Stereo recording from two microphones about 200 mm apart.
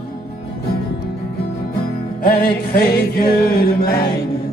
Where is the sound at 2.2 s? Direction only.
50° left (ahead or behind).